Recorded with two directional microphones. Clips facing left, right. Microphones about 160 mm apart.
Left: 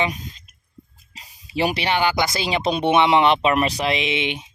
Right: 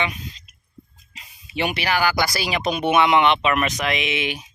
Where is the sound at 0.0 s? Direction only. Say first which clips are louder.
Left 3 dB; 40° left (ahead or behind).